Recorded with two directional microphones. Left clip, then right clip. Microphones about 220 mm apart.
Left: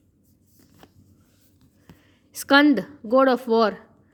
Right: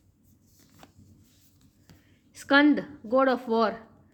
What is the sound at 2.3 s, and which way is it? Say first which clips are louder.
Speech: left 4 dB; 40° left (ahead or behind).